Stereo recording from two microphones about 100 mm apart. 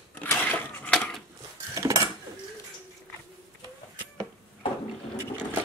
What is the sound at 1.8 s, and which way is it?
Dishes, 35° right (ahead or behind).